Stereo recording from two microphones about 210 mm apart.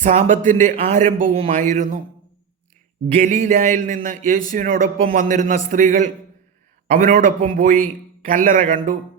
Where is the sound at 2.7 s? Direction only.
40° right (ahead or behind).